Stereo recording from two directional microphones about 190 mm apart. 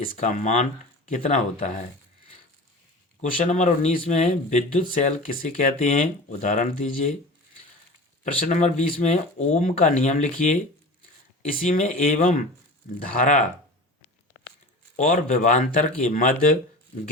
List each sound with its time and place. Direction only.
0.0 s speech: 40° left (ahead or behind)
3.2 s speech: 40° left (ahead or behind)
8.2 s speech: 40° left (ahead or behind)
11.6 s speech: 45° left (ahead or behind)
14.9 s speech: 45° left (ahead or behind)